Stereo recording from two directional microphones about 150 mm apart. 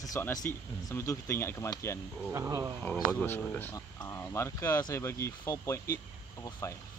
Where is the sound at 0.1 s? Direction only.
20° left (ahead or behind).